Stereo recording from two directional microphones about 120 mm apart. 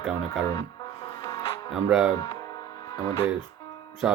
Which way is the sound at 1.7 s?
5° right (ahead or behind).